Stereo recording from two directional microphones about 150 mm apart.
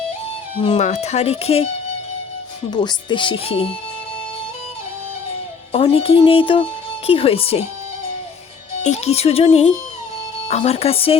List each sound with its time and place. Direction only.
0.8 s speech: 50° left (ahead or behind)
2.6 s speech: 30° left (ahead or behind)
5.7 s speech: 40° left (ahead or behind)
8.8 s speech: 45° left (ahead or behind)